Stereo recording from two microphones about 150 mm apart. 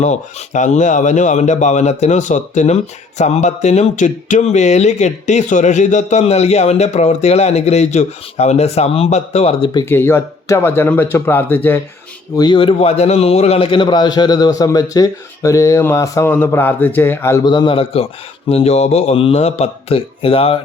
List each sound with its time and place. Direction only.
0.0 s speech: 50° left (ahead or behind)
9.9 s speech: 15° left (ahead or behind)
12.4 s a man's voice: 35° left (ahead or behind); by 17.4 s 15° left (ahead or behind)
17.4 s a man's voice: 30° left (ahead or behind)